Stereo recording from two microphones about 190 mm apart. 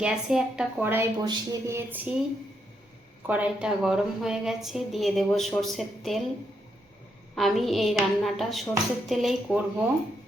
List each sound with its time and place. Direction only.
0.0 s a woman's voice: 5° right (ahead or behind)
3.2 s a woman's voice: 10° right (ahead or behind)
7.3 s a woman's voice: centre (ahead or behind)